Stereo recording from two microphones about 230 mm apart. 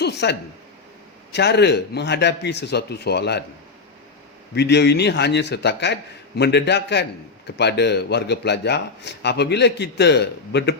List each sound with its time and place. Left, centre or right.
0.0 s a sound: left
1.3 s a man's voice: left
4.5 s a man's voice: left